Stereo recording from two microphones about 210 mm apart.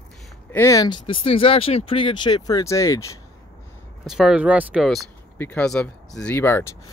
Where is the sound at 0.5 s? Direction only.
15° left (ahead or behind).